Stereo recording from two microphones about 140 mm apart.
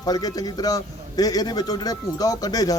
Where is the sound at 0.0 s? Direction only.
25° left (ahead or behind).